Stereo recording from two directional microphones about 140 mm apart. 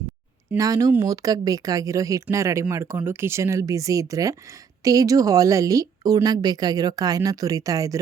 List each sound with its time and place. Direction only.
0.5 s speech: 25° right (ahead or behind)